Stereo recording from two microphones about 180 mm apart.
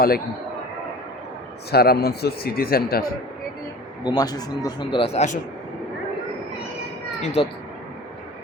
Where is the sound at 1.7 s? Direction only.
60° left (ahead or behind).